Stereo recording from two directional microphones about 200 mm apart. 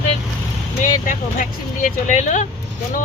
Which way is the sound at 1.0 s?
40° left (ahead or behind).